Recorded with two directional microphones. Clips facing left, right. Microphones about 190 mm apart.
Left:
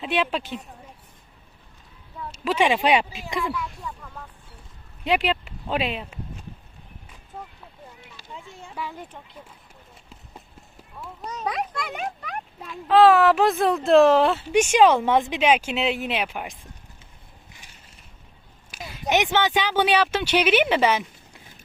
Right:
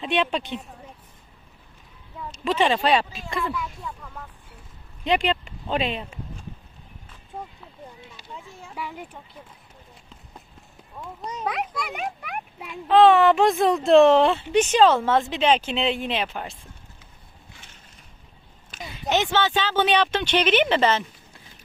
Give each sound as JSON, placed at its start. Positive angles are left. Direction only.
{"t": 0.0, "sound": "speech", "side_deg": 5}
{"t": 2.3, "sound": "speech", "side_deg": 5}
{"t": 3.6, "sound": "speech", "side_deg": 0}
{"t": 7.3, "sound": "a sound", "side_deg": -20}
{"t": 8.7, "sound": "a child's voice", "side_deg": -10}
{"t": 11.3, "sound": "a child's voice", "side_deg": -10}
{"t": 12.9, "sound": "speech", "side_deg": 0}
{"t": 18.7, "sound": "speech", "side_deg": 10}